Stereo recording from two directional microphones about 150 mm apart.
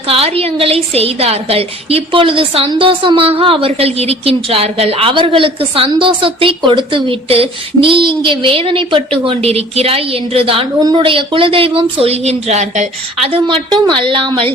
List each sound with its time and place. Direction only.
0.1 s a woman's voice: 40° right (ahead or behind)